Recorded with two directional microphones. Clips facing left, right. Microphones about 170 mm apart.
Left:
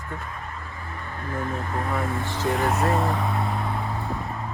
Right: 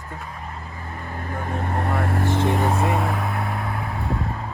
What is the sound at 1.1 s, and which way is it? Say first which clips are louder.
Speech: even; 45° right (ahead or behind).